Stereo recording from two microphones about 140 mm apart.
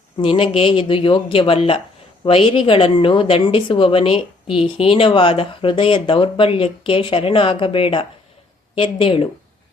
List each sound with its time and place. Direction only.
0.2 s a woman's voice: 40° left (ahead or behind)